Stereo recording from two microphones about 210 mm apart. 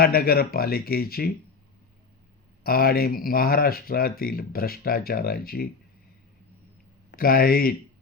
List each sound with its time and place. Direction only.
0.0 s speech: 45° left (ahead or behind)
2.6 s speech: 45° left (ahead or behind)
7.1 s speech: 45° left (ahead or behind)